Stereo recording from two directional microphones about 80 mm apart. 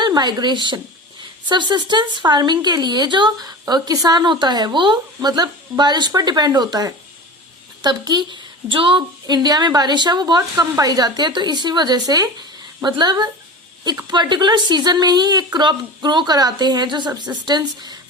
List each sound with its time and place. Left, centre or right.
0.0 s a woman's voice: right
10.8 s speech: right
15.5 s speech: right